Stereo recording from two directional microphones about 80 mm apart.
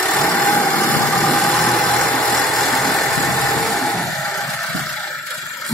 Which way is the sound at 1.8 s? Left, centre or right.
Centre.